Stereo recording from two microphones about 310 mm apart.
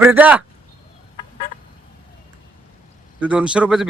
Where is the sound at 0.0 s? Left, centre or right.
Centre.